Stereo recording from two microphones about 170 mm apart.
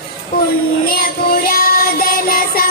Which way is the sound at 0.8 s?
60° left (ahead or behind).